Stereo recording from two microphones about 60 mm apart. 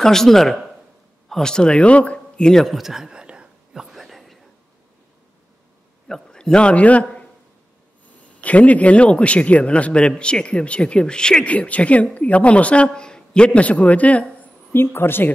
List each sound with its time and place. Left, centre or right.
0.0 s speech: centre
2.6 s whispering: centre
6.0 s a man's voice: centre
8.4 s speech: left
14.7 s a woman's voice: left